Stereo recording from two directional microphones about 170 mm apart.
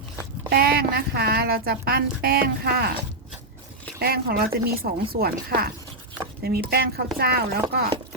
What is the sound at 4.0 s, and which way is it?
A woman's voice, 65° right (ahead or behind).